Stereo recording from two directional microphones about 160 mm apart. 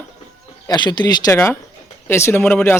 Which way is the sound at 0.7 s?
25° left (ahead or behind).